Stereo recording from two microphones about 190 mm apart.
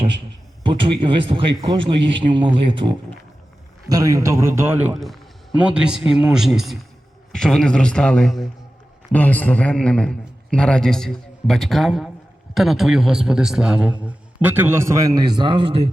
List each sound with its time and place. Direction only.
0.6 s a man's voice: 25° right (ahead or behind)